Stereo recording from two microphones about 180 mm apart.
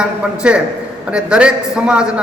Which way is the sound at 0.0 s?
5° right (ahead or behind).